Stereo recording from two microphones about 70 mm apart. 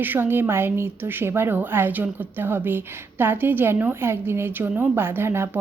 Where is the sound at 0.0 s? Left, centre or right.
Right.